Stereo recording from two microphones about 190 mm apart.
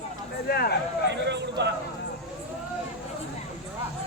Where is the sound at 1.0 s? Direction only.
65° right (ahead or behind).